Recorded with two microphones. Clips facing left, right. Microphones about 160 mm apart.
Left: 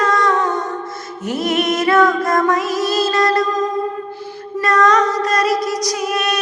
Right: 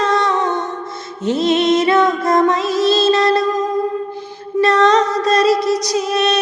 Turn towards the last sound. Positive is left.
turn(degrees=-25)  # may be behind; listen again after turning